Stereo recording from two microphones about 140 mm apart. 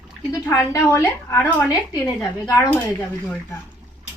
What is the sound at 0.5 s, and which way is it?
A woman's voice, 20° left (ahead or behind).